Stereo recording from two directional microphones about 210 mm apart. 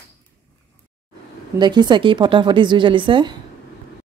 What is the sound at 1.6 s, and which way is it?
Speech, 20° right (ahead or behind).